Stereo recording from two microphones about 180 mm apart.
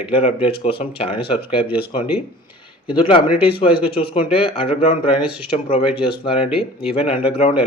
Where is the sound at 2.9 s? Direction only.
30° left (ahead or behind).